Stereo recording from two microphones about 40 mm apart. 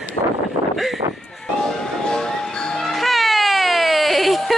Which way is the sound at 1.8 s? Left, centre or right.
Centre.